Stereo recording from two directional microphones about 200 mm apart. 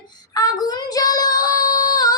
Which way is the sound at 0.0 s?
20° left (ahead or behind).